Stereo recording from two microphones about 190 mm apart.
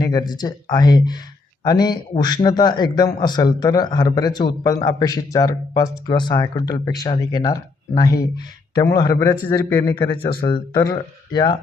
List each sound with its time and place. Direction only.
0.0 s a man's voice: 20° left (ahead or behind)
10.2 s a man's voice: 25° left (ahead or behind)